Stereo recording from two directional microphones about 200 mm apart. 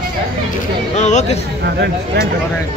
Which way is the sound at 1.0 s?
35° left (ahead or behind).